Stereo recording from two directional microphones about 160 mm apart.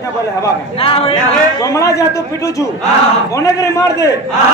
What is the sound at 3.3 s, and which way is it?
Speech, 20° left (ahead or behind).